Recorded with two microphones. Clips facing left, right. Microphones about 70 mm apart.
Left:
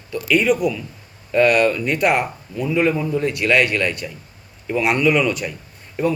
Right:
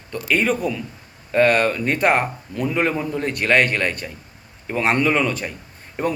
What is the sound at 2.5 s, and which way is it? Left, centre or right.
Speech, right.